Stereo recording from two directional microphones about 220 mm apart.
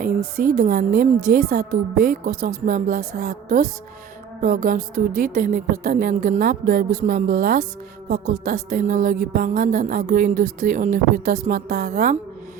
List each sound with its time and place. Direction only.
0.3 s music: 35° right (ahead or behind)
4.4 s speech: 40° right (ahead or behind)
4.9 s music: 40° right (ahead or behind)